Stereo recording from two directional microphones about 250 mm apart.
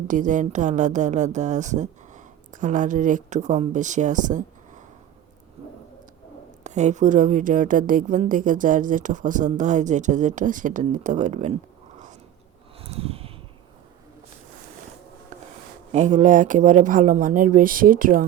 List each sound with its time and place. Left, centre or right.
0.1 s speech: right
6.7 s a woman's voice: right
12.8 s a sound: right
15.9 s a woman's voice: right